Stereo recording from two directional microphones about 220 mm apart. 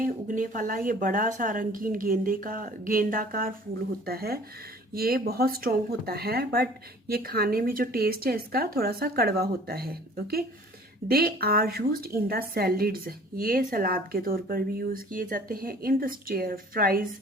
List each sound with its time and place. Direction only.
0.0 s a woman's voice: 35° right (ahead or behind)